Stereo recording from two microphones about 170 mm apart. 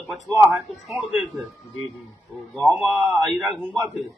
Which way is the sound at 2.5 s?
5° left (ahead or behind).